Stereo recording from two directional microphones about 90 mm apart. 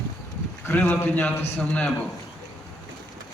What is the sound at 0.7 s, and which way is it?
A man's voice, 25° left (ahead or behind).